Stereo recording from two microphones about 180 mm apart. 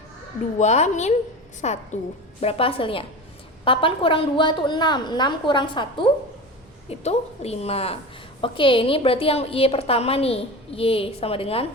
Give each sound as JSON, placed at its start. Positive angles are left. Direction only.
{"t": 0.6, "sound": "a woman's voice", "side_deg": 40}